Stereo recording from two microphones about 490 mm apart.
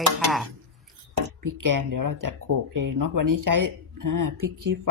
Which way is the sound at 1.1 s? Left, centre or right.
Right.